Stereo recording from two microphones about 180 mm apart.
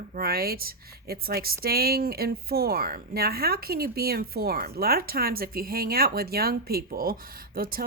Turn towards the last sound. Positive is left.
turn(degrees=-55)  # may be behind; listen again after turning